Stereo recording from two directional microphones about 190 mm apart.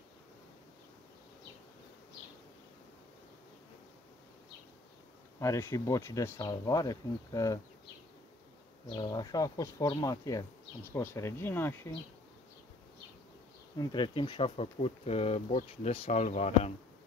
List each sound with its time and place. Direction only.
5.4 s speech: 15° left (ahead or behind)
8.8 s speech: 25° left (ahead or behind)
13.7 s speech: 25° left (ahead or behind)